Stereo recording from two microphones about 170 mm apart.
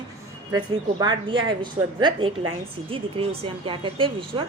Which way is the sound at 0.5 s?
25° right (ahead or behind).